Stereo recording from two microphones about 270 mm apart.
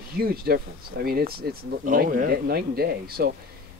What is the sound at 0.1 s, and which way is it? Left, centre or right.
Speech, right.